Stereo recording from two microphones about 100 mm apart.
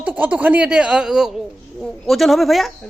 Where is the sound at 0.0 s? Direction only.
15° right (ahead or behind).